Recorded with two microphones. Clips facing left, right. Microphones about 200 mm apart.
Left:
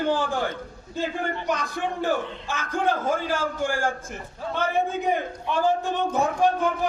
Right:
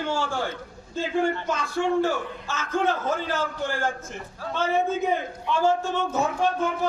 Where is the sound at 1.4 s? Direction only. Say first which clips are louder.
Right 2 dB; 15° left (ahead or behind).